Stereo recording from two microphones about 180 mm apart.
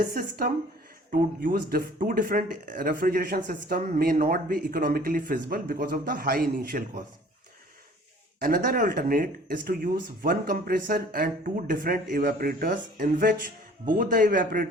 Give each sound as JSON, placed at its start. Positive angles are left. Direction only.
{"t": 0.0, "sound": "speech", "side_deg": -50}
{"t": 8.4, "sound": "speech", "side_deg": -50}